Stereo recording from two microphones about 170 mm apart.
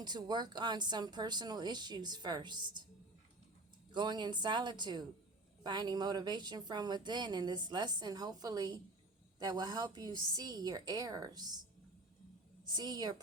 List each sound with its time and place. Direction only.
0.0 s a woman's voice: 25° right (ahead or behind)
3.9 s a woman's voice: 25° right (ahead or behind)
12.6 s a woman's voice: 25° right (ahead or behind)